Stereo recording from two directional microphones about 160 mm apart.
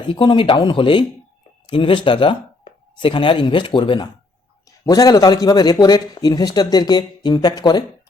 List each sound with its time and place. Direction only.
0.1 s a man's voice: 30° left (ahead or behind)